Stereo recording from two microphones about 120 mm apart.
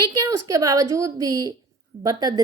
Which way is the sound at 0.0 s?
30° right (ahead or behind).